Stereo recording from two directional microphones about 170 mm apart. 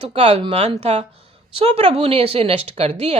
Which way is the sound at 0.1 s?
35° right (ahead or behind).